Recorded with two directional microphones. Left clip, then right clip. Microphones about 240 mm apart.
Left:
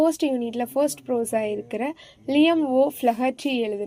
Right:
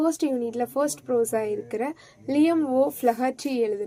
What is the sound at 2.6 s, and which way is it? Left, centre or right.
A woman's voice, left.